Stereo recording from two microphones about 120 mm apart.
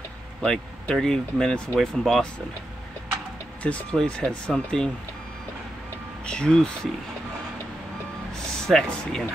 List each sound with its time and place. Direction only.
0.4 s speech: 5° left (ahead or behind)
3.6 s speech: 10° left (ahead or behind)
6.2 s speech: 5° left (ahead or behind)
8.4 s speech: 5° left (ahead or behind)